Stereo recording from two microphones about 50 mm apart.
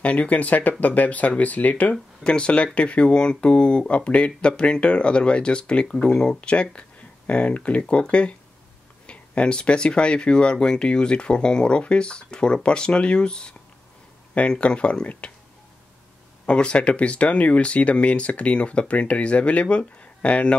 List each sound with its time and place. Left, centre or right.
0.0 s speech: left
2.2 s speech: left
16.4 s speech: left